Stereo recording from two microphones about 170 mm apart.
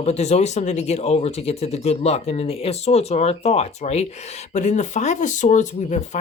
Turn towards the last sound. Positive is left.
turn(degrees=45)  # may be behind; listen again after turning